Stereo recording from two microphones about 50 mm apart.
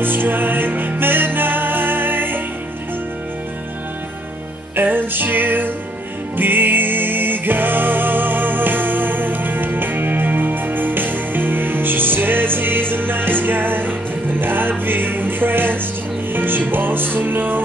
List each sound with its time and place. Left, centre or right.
0.0 s music: right
4.7 s music: right